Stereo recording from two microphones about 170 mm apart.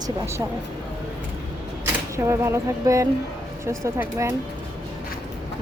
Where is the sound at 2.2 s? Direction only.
15° right (ahead or behind).